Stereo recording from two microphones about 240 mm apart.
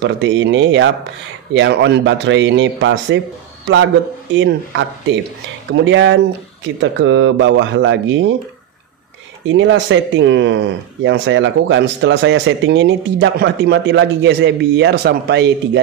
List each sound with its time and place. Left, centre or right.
0.0 s speech: right
4.3 s speech: right
9.5 s speech: right